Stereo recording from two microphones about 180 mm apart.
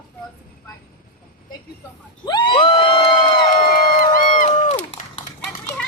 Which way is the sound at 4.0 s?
50° left (ahead or behind).